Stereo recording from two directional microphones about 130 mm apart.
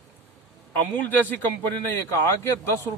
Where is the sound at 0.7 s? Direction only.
15° left (ahead or behind).